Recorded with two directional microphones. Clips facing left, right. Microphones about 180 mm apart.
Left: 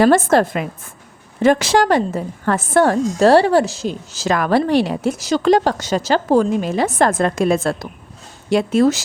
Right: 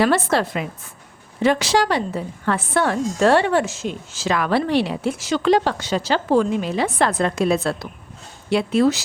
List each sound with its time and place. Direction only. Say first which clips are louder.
0.0 s a woman's voice: left 5 dB; 45° left (ahead or behind)